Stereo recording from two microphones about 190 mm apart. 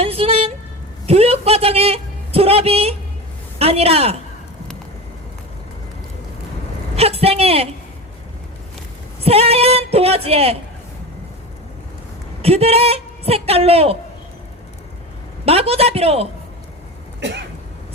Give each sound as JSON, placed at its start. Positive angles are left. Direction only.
{"t": 0.0, "sound": "vehicle", "side_deg": -30}
{"t": 1.0, "sound": "a woman's voice", "side_deg": -30}
{"t": 6.9, "sound": "a sound", "side_deg": -30}
{"t": 9.2, "sound": "a woman's voice", "side_deg": -30}
{"t": 12.4, "sound": "a woman's voice", "side_deg": -30}
{"t": 15.4, "sound": "a woman's voice", "side_deg": -30}
{"t": 17.2, "sound": "throat clearing", "side_deg": -65}